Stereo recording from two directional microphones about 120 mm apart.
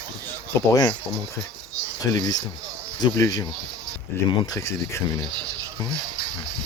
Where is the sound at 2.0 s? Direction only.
30° left (ahead or behind).